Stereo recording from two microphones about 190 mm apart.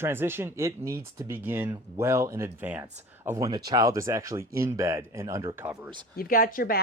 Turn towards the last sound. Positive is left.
turn(degrees=50)  # may be behind; listen again after turning